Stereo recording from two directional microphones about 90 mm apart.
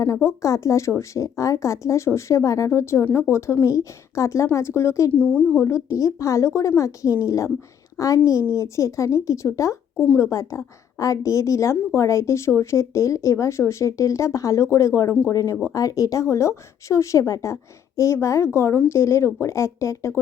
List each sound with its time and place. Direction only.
0.0 s a woman's voice: 30° left (ahead or behind)
5.1 s speech: 15° left (ahead or behind)
5.6 s a woman's voice: 35° left (ahead or behind)